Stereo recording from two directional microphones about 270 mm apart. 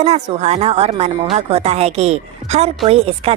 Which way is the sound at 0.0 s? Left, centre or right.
Right.